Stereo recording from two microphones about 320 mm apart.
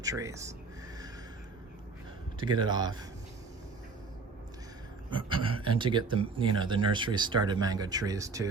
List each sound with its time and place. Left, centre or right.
0.0 s speech: centre
2.4 s speech: centre
5.1 s speech: centre